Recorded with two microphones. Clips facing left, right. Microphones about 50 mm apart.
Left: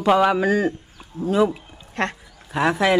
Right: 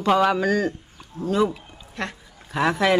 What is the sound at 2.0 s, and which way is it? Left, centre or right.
Speech, left.